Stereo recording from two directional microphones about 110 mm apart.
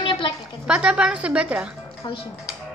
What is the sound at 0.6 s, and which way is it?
A woman's voice, 10° right (ahead or behind).